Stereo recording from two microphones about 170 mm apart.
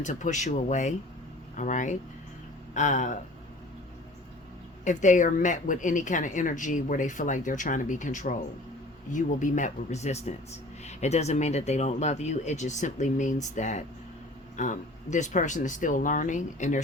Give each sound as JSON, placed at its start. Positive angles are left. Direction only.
{"t": 0.0, "sound": "speech", "side_deg": 45}
{"t": 4.9, "sound": "speech", "side_deg": 45}